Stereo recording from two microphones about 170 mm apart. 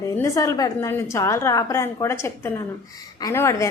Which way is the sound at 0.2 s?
20° left (ahead or behind).